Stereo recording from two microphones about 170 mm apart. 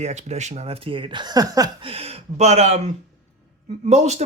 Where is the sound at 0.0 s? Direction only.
40° right (ahead or behind); by 1.9 s 20° right (ahead or behind).